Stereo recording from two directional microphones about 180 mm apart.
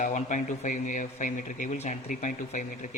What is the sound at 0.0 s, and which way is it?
Speech, 45° left (ahead or behind).